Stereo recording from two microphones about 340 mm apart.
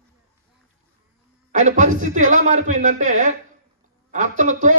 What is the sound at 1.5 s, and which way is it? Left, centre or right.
A man's voice, right.